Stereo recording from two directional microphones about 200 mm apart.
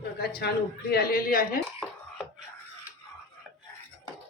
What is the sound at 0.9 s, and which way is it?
Speech, 50° left (ahead or behind).